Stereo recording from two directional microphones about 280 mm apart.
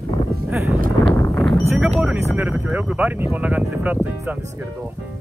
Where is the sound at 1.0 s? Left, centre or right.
Centre.